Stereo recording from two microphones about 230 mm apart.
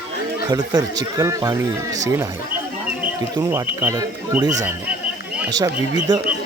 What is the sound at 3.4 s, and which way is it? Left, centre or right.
Speech, centre.